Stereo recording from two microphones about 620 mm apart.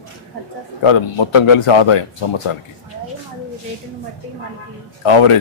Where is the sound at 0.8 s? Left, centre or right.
Left.